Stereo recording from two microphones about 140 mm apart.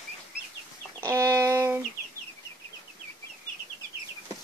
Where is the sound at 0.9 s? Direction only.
20° right (ahead or behind).